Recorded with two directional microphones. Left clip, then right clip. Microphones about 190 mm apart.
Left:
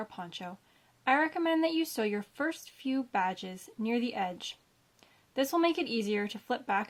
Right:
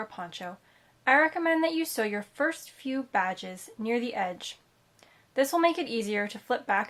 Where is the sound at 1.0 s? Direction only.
35° left (ahead or behind).